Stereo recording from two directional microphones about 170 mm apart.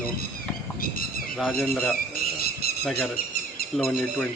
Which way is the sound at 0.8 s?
55° left (ahead or behind).